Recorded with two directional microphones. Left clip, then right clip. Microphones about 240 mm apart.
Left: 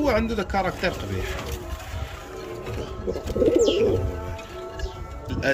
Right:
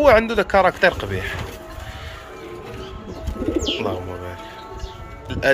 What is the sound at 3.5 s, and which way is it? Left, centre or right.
Bird, left.